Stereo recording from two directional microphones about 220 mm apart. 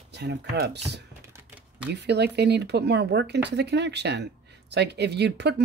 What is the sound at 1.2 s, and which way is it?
Typing, 10° right (ahead or behind).